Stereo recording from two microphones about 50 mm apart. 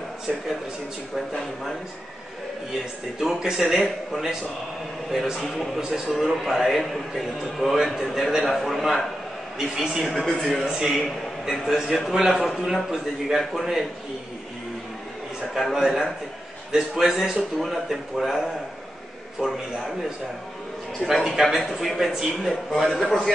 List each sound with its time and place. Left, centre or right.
1.1 s a man's voice: centre
3.2 s a man's voice: centre
5.8 s a man's voice: centre
10.0 s a man's voice: centre
10.5 s a man's voice: centre
15.5 s a man's voice: centre
17.4 s a man's voice: centre
21.2 s a man's voice: centre